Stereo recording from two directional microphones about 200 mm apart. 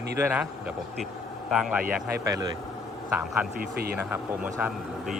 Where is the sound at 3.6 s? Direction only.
50° right (ahead or behind).